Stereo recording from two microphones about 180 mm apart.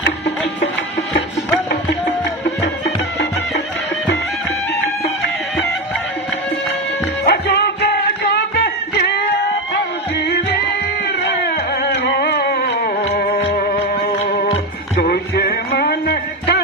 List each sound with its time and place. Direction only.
7.2 s music: 65° left (ahead or behind)
11.2 s music: 60° left (ahead or behind)
13.7 s music: 35° left (ahead or behind)
15.0 s music: 60° left (ahead or behind)